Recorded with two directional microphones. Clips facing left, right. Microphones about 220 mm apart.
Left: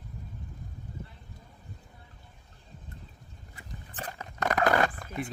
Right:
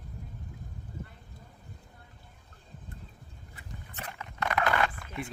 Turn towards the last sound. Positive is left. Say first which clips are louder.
# left 4 dB
turn(degrees=35)  # may be behind; listen again after turning